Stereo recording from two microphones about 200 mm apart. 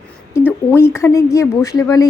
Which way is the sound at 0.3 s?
10° left (ahead or behind).